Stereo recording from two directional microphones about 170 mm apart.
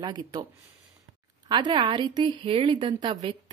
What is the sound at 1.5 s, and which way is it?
A woman's voice, 25° right (ahead or behind).